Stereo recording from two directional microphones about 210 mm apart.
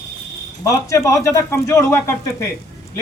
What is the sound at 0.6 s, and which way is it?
Speech, 15° left (ahead or behind).